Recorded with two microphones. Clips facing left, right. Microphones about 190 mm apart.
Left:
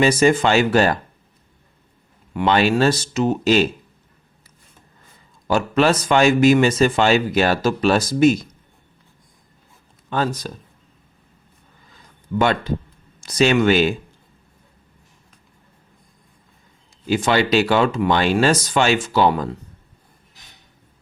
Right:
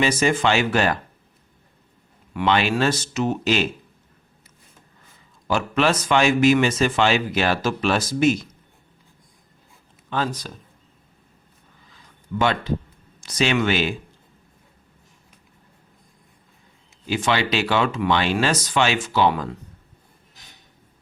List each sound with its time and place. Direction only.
0.0 s speech: 40° left (ahead or behind)
2.3 s speech: 40° left (ahead or behind)
5.5 s speech: 40° left (ahead or behind)
10.1 s speech: 45° left (ahead or behind)
12.3 s speech: 45° left (ahead or behind)
17.1 s speech: 45° left (ahead or behind)